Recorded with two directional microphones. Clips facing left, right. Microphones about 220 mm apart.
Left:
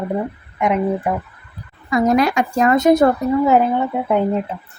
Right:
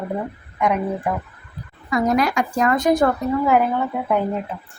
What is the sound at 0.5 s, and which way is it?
Speech, 20° left (ahead or behind).